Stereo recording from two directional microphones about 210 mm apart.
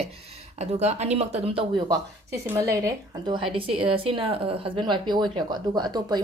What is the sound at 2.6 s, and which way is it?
Speech, 15° right (ahead or behind).